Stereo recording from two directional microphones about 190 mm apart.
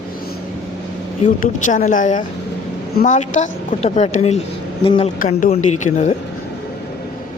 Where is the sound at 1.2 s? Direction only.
40° left (ahead or behind).